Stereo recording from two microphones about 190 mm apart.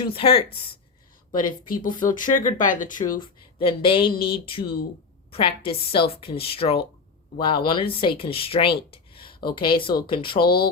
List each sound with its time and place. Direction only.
0.0 s a woman's voice: 30° left (ahead or behind)
1.5 s speech: 45° left (ahead or behind)
3.2 s a woman's voice: 30° left (ahead or behind)
10.4 s speech: 55° left (ahead or behind)